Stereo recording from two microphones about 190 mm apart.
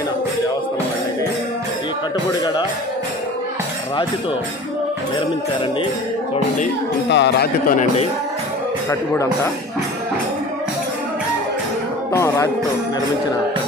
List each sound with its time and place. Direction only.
7.1 s speech: 65° left (ahead or behind); by 8.1 s 45° left (ahead or behind)
12.1 s speech: 15° left (ahead or behind)